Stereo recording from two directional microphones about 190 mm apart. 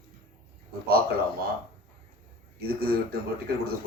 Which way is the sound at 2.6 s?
55° right (ahead or behind).